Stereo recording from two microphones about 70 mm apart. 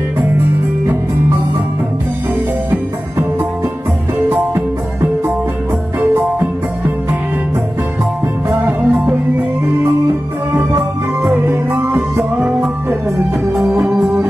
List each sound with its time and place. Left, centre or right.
4.3 s music: right
8.5 s music: right
11.4 s music: right
12.2 s music: centre
13.8 s music: centre